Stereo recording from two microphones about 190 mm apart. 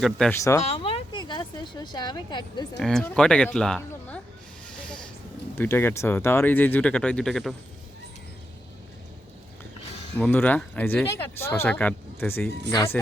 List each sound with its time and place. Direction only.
0.0 s speech: centre (ahead or behind)
0.6 s speech: 30° left (ahead or behind)
2.8 s speech: 5° left (ahead or behind)
5.5 s speech: 10° left (ahead or behind)
10.2 s speech: 10° left (ahead or behind)